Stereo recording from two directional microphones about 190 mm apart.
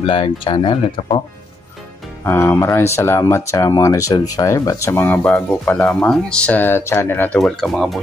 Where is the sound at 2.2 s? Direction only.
10° left (ahead or behind).